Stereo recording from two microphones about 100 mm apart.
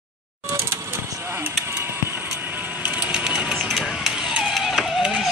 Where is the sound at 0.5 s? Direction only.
30° right (ahead or behind).